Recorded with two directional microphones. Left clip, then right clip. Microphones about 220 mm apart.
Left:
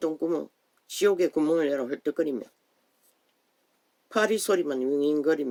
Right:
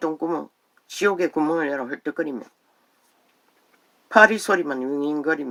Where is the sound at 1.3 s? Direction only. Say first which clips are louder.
Right 2 dB; 25° right (ahead or behind).